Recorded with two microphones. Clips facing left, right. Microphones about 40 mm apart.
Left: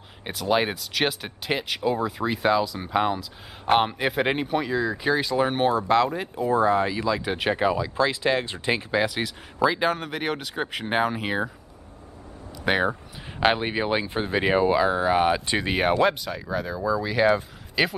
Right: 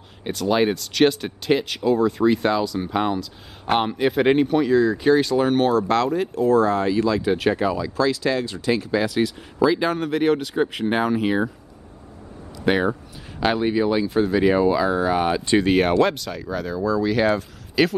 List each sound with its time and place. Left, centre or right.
0.2 s speech: centre; by 9.0 s left
9.0 s speech: centre
12.6 s speech: centre
13.4 s speech: left